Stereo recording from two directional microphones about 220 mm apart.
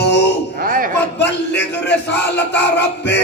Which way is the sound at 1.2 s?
50° left (ahead or behind).